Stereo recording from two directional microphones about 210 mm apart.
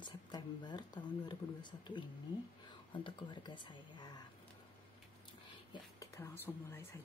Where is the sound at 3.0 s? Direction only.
20° left (ahead or behind).